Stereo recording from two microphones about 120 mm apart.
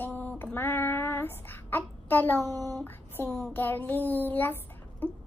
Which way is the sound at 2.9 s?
15° left (ahead or behind).